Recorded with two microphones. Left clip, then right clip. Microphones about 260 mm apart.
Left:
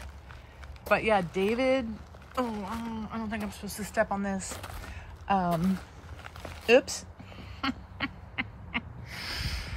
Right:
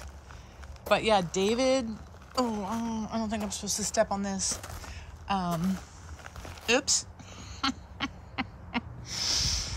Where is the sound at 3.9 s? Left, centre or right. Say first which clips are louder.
Even; centre.